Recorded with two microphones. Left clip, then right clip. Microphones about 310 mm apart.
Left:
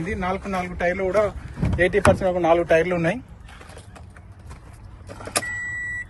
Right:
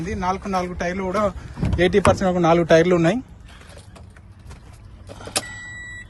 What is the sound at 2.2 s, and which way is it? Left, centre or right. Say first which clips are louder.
Speech: right 1 dB; right.